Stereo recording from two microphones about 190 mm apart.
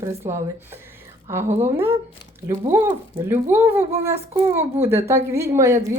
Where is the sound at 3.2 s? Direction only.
15° right (ahead or behind).